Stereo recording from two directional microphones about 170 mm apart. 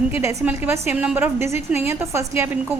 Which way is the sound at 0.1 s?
15° right (ahead or behind).